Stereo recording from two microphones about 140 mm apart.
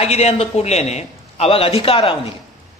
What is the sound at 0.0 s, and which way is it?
A man's voice, 50° left (ahead or behind).